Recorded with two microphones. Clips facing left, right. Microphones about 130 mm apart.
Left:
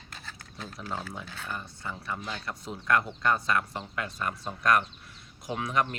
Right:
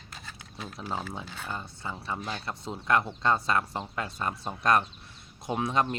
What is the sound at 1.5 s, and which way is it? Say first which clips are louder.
Speech: right 1 dB; 25° right (ahead or behind).